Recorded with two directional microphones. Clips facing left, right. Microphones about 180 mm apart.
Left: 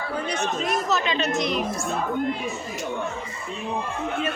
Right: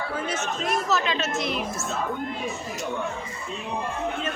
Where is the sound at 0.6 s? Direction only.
Centre (ahead or behind).